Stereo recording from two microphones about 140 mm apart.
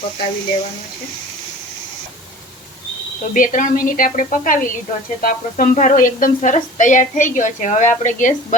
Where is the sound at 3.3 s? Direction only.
75° left (ahead or behind).